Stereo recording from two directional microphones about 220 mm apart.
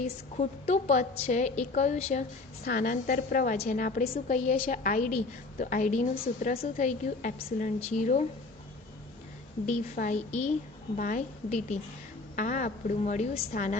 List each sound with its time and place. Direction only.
0.0 s a woman's voice: 30° left (ahead or behind)
2.6 s a woman's voice: 40° left (ahead or behind)
9.6 s a woman's voice: 35° left (ahead or behind)